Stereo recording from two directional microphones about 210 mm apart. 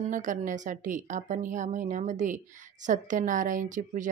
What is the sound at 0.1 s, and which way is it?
A woman's voice, 35° right (ahead or behind).